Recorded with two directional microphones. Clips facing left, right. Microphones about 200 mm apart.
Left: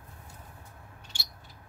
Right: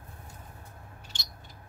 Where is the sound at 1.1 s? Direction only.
10° left (ahead or behind).